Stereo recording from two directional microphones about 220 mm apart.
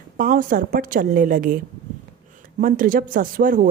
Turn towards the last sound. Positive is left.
turn(degrees=-40)  # may be behind; listen again after turning